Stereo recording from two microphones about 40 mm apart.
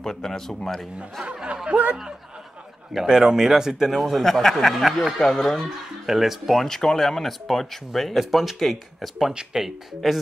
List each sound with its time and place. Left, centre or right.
0.0 s speech: centre
1.3 s speech: centre
2.9 s speech: centre
4.0 s speech: centre
6.0 s speech: centre